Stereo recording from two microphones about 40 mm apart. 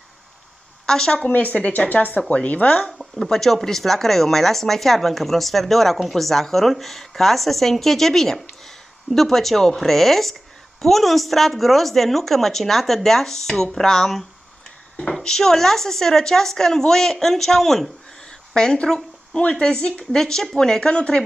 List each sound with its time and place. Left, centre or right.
0.8 s a woman's voice: centre
1.1 s speech: left
3.2 s speech: centre
15.2 s speech: centre
20.2 s speech: centre
20.8 s speech: left